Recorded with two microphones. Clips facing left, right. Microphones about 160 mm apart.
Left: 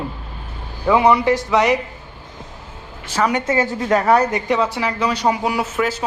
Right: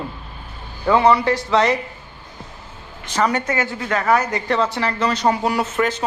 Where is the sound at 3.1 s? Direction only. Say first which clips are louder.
Left 1 dB; 10° left (ahead or behind).